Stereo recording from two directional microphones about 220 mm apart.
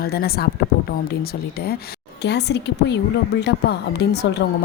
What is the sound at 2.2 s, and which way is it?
A woman's voice, 50° left (ahead or behind).